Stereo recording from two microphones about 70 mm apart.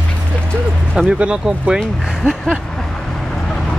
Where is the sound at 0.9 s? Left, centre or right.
Centre.